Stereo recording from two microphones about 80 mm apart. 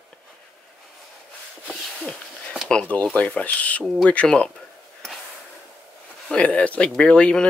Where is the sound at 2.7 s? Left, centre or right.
Centre.